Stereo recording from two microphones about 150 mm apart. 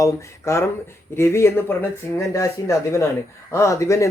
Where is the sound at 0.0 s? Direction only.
20° left (ahead or behind).